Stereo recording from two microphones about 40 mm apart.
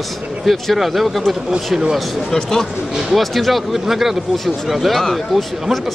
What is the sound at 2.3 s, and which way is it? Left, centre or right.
Speech, centre.